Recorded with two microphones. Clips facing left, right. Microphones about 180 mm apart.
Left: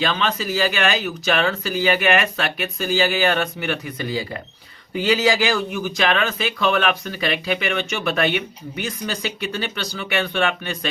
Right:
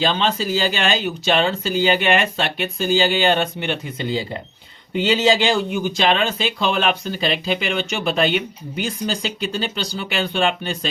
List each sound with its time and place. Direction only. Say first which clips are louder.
0.0 s speech: right 2 dB; 25° right (ahead or behind)